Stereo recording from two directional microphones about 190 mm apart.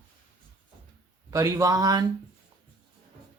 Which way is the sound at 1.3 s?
15° right (ahead or behind).